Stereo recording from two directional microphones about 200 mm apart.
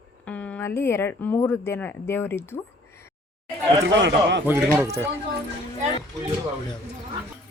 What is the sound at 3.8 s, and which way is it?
Speech, 60° right (ahead or behind).